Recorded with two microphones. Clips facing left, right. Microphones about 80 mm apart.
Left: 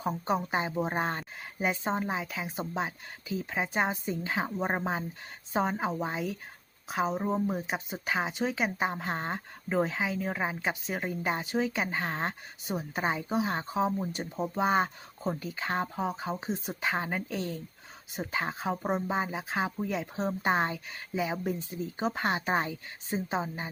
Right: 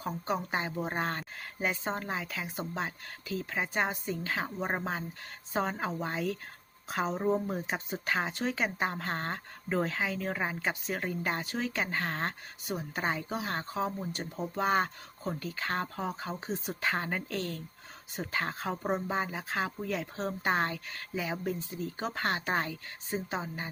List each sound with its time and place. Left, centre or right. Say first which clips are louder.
0.0 s a woman's voice: left 3 dB; left